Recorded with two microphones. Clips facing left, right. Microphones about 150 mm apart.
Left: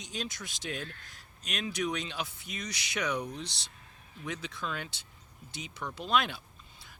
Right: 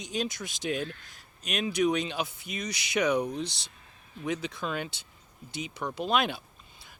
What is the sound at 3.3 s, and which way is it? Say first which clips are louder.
Speech: right 7 dB; 50° right (ahead or behind).